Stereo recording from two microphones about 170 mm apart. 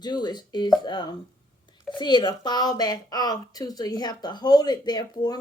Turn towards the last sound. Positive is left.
turn(degrees=25)  # may be behind; listen again after turning